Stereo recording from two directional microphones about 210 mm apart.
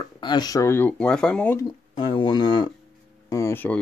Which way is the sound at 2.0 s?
20° left (ahead or behind).